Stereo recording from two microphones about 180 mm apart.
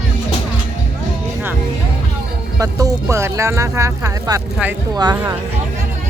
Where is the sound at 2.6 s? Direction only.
20° right (ahead or behind).